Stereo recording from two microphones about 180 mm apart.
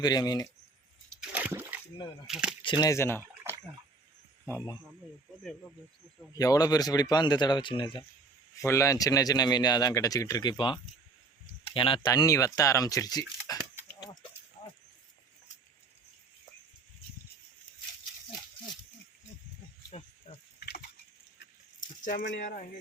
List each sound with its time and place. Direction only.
0.0 s speech: 20° left (ahead or behind)
1.3 s splash: 10° right (ahead or behind)
2.2 s speech: 5° right (ahead or behind)
2.6 s speech: 25° left (ahead or behind)
4.4 s speech: 15° left (ahead or behind)
6.3 s speech: 20° left (ahead or behind)
8.5 s speech: 15° left (ahead or behind)
19.9 s cricket: 35° left (ahead or behind)
20.6 s a sound: 65° left (ahead or behind)
22.4 s speech: 50° left (ahead or behind)